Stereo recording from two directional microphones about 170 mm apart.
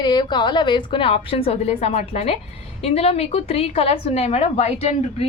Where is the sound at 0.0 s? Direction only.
25° left (ahead or behind).